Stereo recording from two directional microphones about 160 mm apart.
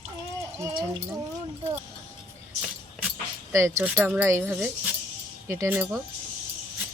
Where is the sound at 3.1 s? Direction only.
15° right (ahead or behind).